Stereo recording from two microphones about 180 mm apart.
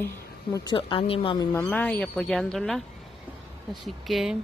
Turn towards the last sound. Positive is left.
turn(degrees=0)  # may be behind; listen again after turning